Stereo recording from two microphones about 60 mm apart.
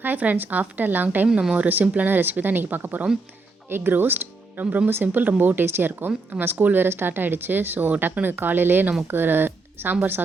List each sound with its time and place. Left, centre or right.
0.0 s speech: right
4.6 s speech: right
4.9 s speech: right